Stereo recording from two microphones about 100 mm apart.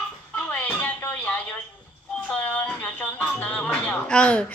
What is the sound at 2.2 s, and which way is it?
A woman's voice, 10° left (ahead or behind).